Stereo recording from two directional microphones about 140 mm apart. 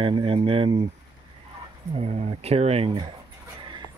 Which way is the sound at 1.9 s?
50° right (ahead or behind).